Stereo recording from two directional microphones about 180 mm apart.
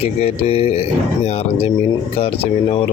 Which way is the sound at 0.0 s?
35° left (ahead or behind).